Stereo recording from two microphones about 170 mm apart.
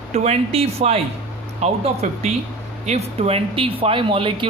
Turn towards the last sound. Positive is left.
turn(degrees=-30)  # may be behind; listen again after turning